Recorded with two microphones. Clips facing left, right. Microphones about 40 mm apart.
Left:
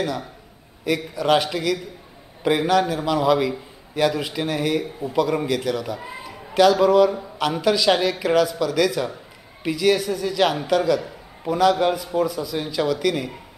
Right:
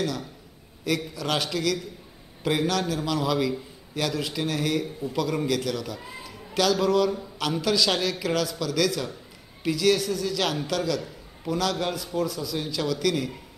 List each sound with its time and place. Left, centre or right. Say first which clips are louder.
0.0 s a man's voice: left 3 dB; centre